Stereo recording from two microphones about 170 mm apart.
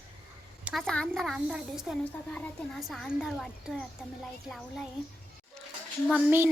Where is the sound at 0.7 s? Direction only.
Centre (ahead or behind).